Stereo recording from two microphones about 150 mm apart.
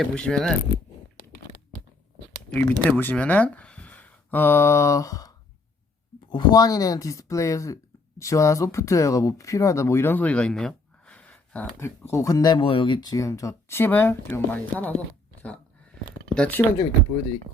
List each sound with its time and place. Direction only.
0.0 s speech: 5° left (ahead or behind)
2.5 s speech: 10° left (ahead or behind)
6.3 s speech: 30° left (ahead or behind); by 11.9 s 10° left (ahead or behind)
12.1 s speech: 25° left (ahead or behind)
16.3 s speech: 10° left (ahead or behind)